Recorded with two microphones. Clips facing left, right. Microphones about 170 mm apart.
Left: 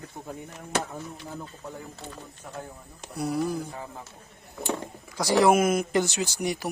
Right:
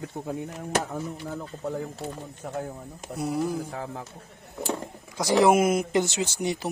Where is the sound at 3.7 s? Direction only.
75° right (ahead or behind).